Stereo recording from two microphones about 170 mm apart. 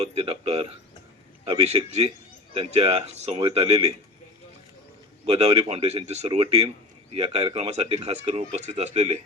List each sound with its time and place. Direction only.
0.0 s a man's voice: 35° right (ahead or behind)
5.2 s a man's voice: 35° right (ahead or behind)